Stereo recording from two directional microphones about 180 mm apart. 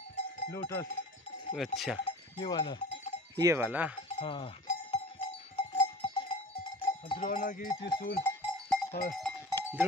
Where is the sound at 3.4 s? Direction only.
15° right (ahead or behind).